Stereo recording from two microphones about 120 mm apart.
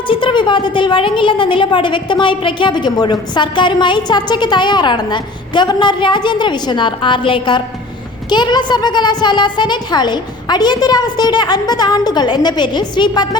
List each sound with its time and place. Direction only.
0.1 s a woman's voice: 45° left (ahead or behind)